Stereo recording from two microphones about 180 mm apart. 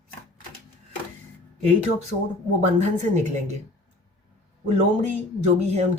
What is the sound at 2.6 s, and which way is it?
Speech, 40° right (ahead or behind).